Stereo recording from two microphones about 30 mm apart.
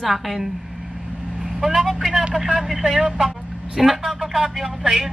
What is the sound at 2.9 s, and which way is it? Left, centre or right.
Speech, right.